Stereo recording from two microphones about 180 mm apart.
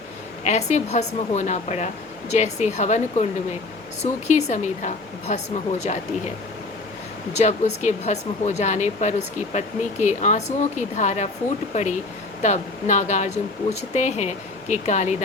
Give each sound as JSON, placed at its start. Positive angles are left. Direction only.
{"t": 0.4, "sound": "speech", "side_deg": 40}
{"t": 7.3, "sound": "speech", "side_deg": 40}